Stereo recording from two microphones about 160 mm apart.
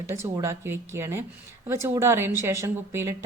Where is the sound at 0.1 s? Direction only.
15° right (ahead or behind).